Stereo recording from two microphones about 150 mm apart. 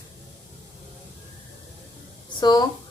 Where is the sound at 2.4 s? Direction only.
30° left (ahead or behind).